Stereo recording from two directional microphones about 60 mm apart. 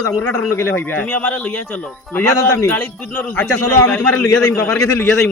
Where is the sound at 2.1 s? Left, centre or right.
Left.